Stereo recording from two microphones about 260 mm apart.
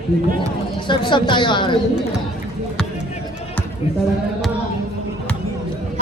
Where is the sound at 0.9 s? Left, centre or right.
Centre.